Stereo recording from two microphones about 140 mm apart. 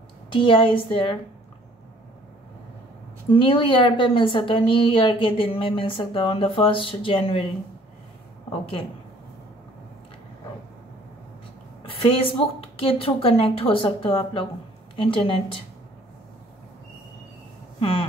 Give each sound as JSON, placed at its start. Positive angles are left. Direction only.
{"t": 0.3, "sound": "a woman's voice", "side_deg": 40}
{"t": 3.3, "sound": "a woman's voice", "side_deg": 40}
{"t": 11.8, "sound": "a woman's voice", "side_deg": 40}
{"t": 17.7, "sound": "a sound", "side_deg": 45}